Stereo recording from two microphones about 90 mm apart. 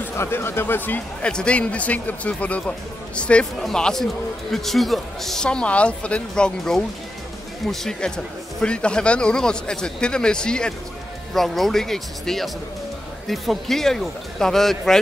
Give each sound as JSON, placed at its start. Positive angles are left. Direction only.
{"t": 0.0, "sound": "speech", "side_deg": 25}